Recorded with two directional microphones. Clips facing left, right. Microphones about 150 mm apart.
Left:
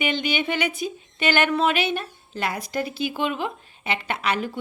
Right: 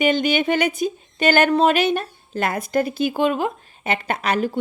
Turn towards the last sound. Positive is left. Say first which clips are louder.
# right 4 dB
turn(degrees=-45)  # may be behind; listen again after turning